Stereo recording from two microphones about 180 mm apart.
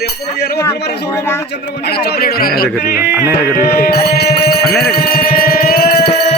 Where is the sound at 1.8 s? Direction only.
60° left (ahead or behind).